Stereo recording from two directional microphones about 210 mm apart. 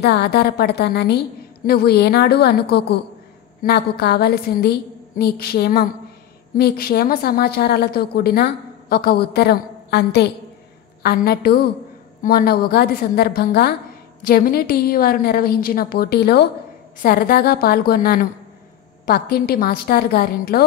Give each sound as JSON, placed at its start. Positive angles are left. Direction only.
{"t": 0.0, "sound": "a woman's voice", "side_deg": 50}